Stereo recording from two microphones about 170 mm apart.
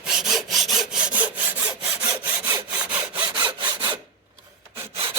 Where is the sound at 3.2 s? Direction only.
25° right (ahead or behind).